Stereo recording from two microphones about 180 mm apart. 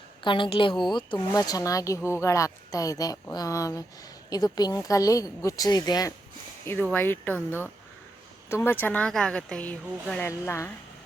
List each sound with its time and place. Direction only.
0.2 s speech: 25° left (ahead or behind)
6.9 s speech: 10° left (ahead or behind)